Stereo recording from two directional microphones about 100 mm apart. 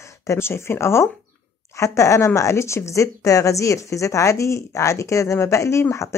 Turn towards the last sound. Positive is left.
turn(degrees=30)  # may be behind; listen again after turning